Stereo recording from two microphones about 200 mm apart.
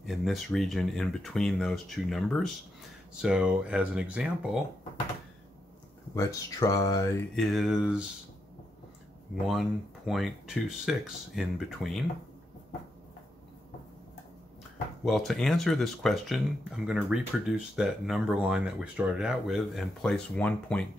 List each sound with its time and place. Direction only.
0.0 s speech: centre (ahead or behind)
6.1 s speech: 15° left (ahead or behind)
7.3 s speech: centre (ahead or behind)
9.3 s speech: centre (ahead or behind)
15.0 s speech: centre (ahead or behind)